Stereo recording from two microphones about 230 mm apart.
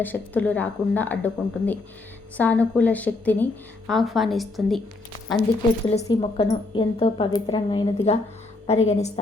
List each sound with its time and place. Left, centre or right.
0.0 s a woman's voice: centre
5.8 s a woman's voice: left